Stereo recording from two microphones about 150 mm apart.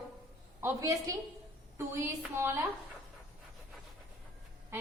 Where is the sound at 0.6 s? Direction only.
20° right (ahead or behind).